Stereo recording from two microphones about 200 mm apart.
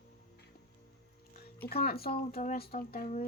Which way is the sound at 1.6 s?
50° left (ahead or behind).